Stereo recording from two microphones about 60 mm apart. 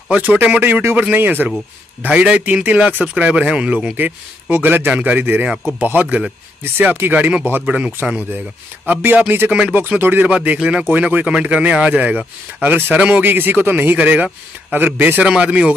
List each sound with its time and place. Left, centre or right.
0.1 s a man's voice: right
2.0 s a man's voice: centre
3.9 s a man's voice: right
7.6 s a man's voice: centre
8.8 s speech: right
9.5 s speech: centre
9.8 s a man's voice: right
15.2 s speech: centre